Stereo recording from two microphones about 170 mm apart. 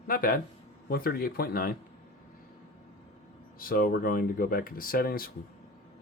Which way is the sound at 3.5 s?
60° left (ahead or behind).